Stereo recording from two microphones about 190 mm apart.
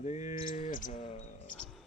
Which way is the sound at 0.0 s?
35° left (ahead or behind).